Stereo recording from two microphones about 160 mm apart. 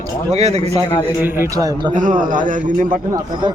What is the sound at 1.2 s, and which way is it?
Speech, 15° right (ahead or behind).